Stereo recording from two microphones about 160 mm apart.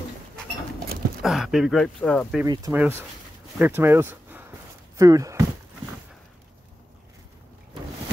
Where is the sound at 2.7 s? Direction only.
10° right (ahead or behind).